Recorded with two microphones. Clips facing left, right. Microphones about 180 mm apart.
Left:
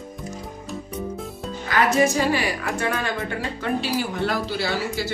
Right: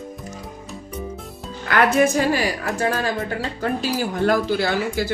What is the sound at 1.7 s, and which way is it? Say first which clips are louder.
Speech: right 2 dB; 55° right (ahead or behind).